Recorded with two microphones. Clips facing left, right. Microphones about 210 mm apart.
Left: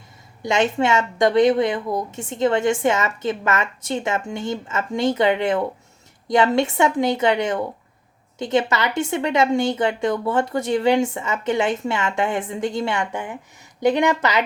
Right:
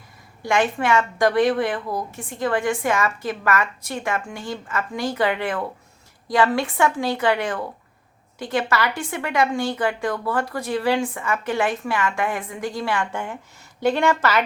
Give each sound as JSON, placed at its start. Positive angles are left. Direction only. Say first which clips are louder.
{"t": 0.4, "sound": "a woman's voice", "louder": "left 2 dB", "side_deg": 20}